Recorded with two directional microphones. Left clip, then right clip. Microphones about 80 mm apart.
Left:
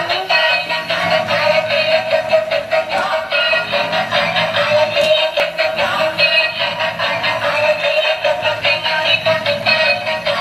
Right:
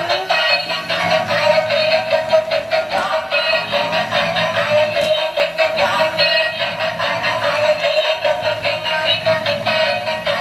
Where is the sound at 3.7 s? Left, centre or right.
Centre.